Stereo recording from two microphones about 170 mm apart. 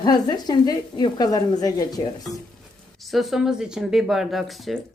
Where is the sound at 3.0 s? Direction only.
Centre (ahead or behind).